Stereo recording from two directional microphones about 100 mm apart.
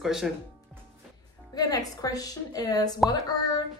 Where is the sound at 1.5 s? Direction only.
40° left (ahead or behind).